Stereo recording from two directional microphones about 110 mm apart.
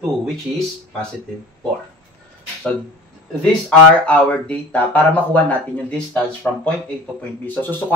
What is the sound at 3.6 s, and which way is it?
Speech, 10° left (ahead or behind).